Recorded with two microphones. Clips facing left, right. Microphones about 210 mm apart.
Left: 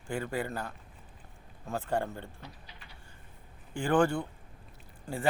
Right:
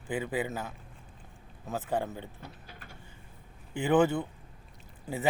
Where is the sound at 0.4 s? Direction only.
5° right (ahead or behind).